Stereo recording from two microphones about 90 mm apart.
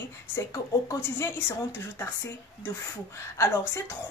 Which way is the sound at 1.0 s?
25° left (ahead or behind).